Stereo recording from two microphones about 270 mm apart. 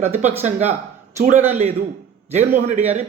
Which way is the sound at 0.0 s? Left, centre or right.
Right.